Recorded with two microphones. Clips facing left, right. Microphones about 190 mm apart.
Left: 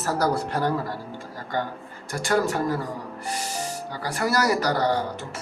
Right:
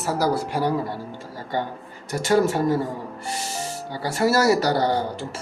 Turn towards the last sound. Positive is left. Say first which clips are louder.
# right 2 dB
turn(degrees=-30)  # may be behind; listen again after turning